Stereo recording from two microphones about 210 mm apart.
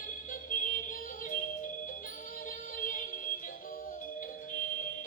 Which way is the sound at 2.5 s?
40° left (ahead or behind).